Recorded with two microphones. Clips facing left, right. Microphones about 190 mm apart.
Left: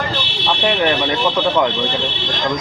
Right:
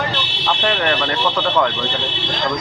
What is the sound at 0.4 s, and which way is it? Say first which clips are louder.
Fire alarm: left 2 dB; 15° left (ahead or behind).